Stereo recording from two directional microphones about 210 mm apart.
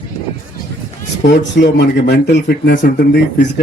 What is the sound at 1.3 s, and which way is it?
Speech, 55° left (ahead or behind).